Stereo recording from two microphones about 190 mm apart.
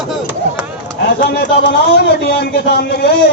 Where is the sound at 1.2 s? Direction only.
65° left (ahead or behind).